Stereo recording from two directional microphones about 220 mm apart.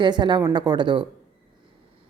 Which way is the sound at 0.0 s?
20° right (ahead or behind).